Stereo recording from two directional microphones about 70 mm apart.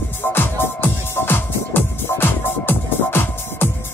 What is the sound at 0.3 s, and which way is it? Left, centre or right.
Music, left.